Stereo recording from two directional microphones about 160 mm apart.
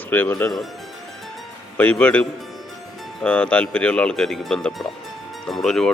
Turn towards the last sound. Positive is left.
turn(degrees=5)  # may be behind; listen again after turning